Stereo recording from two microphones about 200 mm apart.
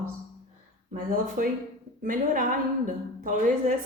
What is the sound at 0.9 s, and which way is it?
A woman's voice, 45° right (ahead or behind).